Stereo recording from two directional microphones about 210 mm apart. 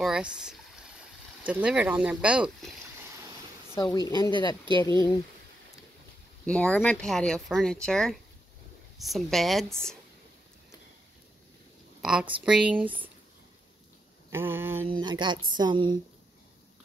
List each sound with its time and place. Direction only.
0.0 s speech: 5° right (ahead or behind)
3.7 s speech: 20° left (ahead or behind)
6.4 s speech: 5° left (ahead or behind)
12.0 s a woman's voice: 5° right (ahead or behind)
14.3 s a sound: 10° right (ahead or behind)
14.9 s speech: 20° right (ahead or behind)